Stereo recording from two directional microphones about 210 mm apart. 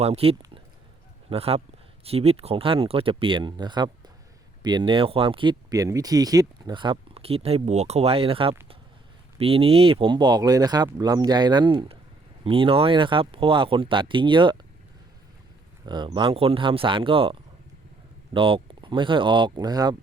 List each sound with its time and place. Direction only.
0.0 s speech: 30° right (ahead or behind)
15.9 s speech: 20° right (ahead or behind)
18.3 s speech: 25° right (ahead or behind)